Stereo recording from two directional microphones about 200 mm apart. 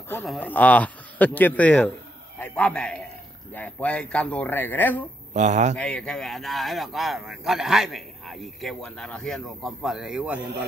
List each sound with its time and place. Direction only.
0.2 s speech: 5° left (ahead or behind)
5.3 s speech: 35° right (ahead or behind)
5.8 s speech: 5° left (ahead or behind)